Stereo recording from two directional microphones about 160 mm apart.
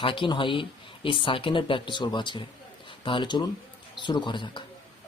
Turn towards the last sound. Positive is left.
turn(degrees=30)  # may be behind; listen again after turning